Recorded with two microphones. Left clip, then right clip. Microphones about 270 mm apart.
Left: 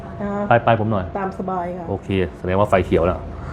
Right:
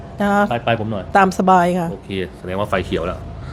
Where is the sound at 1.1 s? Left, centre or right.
Right.